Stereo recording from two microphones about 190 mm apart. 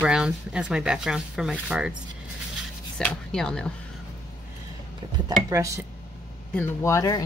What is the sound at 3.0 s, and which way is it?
Speech, 5° left (ahead or behind).